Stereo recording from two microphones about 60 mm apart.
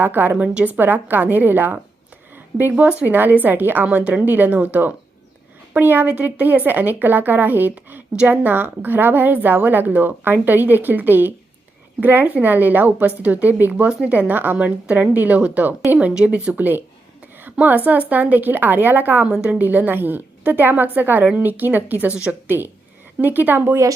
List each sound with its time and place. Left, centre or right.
0.0 s a woman's voice: right
0.4 s a woman's voice: right
3.8 s a woman's voice: right
17.4 s a sound: right
17.8 s a woman's voice: right
22.4 s a woman's voice: right